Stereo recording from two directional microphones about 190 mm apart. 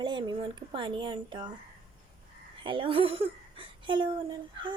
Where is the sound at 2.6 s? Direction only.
25° right (ahead or behind).